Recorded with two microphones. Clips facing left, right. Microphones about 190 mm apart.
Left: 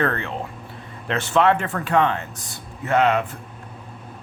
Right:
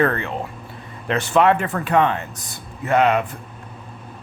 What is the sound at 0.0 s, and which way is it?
Speech, 15° right (ahead or behind).